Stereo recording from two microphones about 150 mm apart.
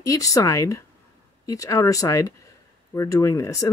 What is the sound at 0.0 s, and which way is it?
Speech, 20° left (ahead or behind).